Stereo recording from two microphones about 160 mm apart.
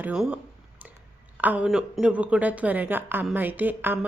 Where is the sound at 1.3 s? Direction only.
10° right (ahead or behind).